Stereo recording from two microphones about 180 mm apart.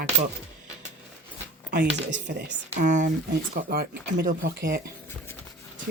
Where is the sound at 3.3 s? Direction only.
60° right (ahead or behind).